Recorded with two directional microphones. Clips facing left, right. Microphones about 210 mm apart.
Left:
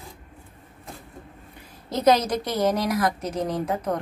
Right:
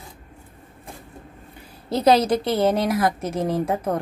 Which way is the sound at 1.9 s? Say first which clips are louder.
Right 3 dB; 30° right (ahead or behind).